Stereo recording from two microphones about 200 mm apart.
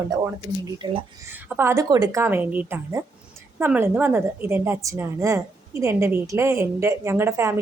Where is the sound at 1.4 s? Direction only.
10° right (ahead or behind).